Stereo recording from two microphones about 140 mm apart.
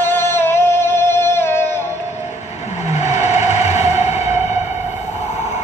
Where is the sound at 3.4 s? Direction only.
55° left (ahead or behind).